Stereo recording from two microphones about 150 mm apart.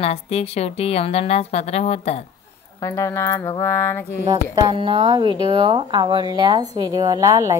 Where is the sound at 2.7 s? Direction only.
20° left (ahead or behind).